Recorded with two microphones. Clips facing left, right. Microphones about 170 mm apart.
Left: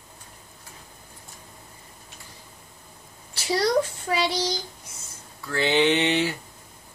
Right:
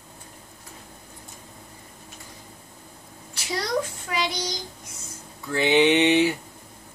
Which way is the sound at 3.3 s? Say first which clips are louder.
Left 5 dB; 30° left (ahead or behind).